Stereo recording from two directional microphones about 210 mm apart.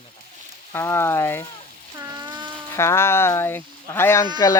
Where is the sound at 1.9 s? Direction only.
20° right (ahead or behind).